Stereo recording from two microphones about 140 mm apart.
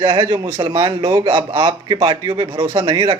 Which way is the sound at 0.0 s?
35° right (ahead or behind).